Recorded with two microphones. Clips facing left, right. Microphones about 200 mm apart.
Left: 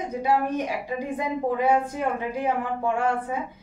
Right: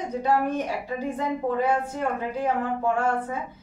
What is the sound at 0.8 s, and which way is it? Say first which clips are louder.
A woman's voice: even; 10° left (ahead or behind).